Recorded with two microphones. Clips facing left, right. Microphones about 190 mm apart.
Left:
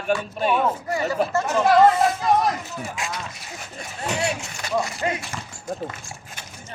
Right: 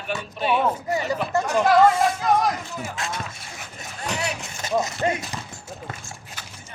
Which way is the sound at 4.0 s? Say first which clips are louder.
Left 3 dB; 30° left (ahead or behind).